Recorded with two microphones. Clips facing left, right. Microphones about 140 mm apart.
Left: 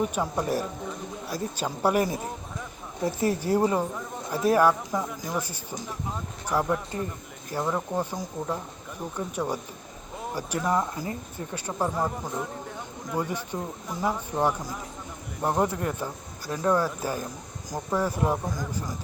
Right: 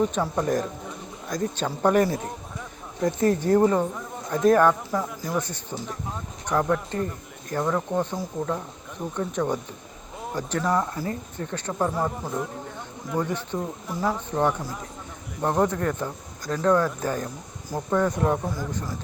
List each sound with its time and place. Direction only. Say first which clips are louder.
0.0 s speech: right 3 dB; 10° left (ahead or behind)
11.9 s speech: right 2 dB; centre (ahead or behind)
13.1 s speech: right 3 dB; 10° left (ahead or behind)